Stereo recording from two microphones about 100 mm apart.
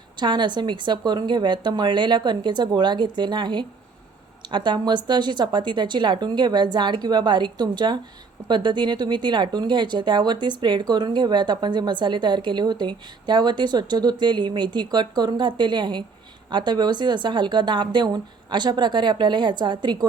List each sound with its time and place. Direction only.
0.2 s speech: 50° right (ahead or behind)